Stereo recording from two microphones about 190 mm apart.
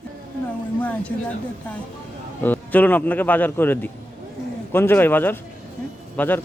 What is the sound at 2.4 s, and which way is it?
Speech, 10° left (ahead or behind).